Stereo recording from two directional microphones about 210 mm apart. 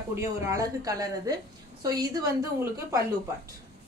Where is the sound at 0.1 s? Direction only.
15° right (ahead or behind).